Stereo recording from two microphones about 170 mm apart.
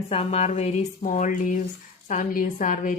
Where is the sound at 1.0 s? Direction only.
50° left (ahead or behind).